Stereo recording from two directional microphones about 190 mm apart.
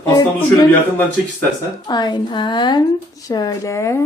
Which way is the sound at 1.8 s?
25° left (ahead or behind).